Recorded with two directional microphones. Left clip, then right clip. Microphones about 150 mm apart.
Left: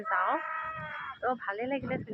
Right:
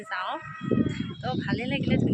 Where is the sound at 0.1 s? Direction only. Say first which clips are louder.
Left 3 dB; 30° right (ahead or behind).